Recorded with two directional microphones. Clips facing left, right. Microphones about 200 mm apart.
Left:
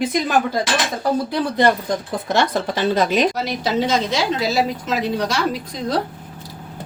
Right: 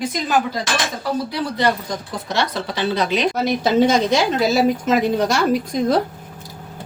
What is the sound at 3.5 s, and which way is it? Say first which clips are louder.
A woman's voice: right 4 dB; 50° right (ahead or behind).